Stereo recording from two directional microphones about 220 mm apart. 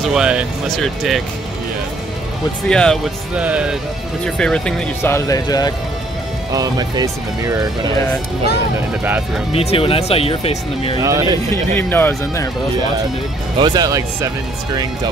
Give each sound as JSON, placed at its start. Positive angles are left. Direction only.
{"t": 0.0, "sound": "speech", "side_deg": -5}
{"t": 2.7, "sound": "speech", "side_deg": 5}
{"t": 6.5, "sound": "speech", "side_deg": -15}
{"t": 9.5, "sound": "speech", "side_deg": 25}
{"t": 11.0, "sound": "speech", "side_deg": -15}
{"t": 11.5, "sound": "speech", "side_deg": 10}
{"t": 13.6, "sound": "speech", "side_deg": -15}